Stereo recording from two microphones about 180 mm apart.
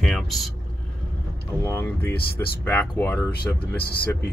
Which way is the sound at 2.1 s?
60° left (ahead or behind).